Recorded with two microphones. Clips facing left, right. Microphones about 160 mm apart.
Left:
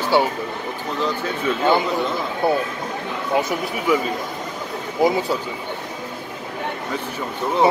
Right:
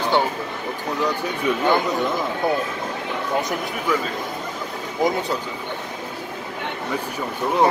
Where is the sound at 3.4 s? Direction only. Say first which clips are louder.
Left 5 dB; 5° left (ahead or behind).